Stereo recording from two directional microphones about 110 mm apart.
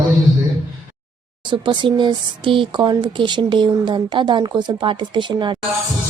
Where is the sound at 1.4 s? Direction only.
45° right (ahead or behind).